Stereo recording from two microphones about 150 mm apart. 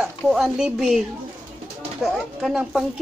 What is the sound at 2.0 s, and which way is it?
Speech, 5° right (ahead or behind).